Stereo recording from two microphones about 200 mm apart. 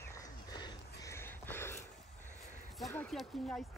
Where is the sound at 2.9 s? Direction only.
5° left (ahead or behind).